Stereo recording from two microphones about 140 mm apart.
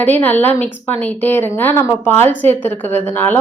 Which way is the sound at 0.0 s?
15° left (ahead or behind).